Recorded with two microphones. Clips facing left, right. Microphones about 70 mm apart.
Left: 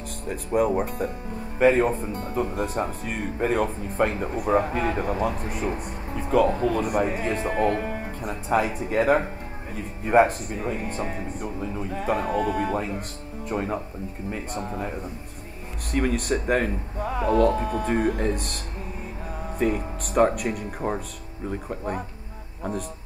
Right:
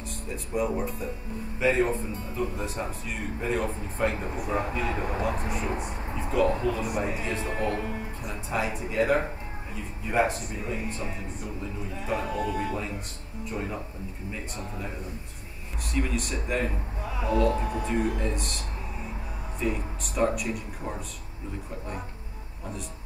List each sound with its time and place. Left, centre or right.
0.3 s speech: left
15.9 s speech: left
19.6 s speech: left